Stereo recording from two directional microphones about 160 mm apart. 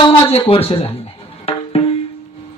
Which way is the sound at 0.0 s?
35° left (ahead or behind).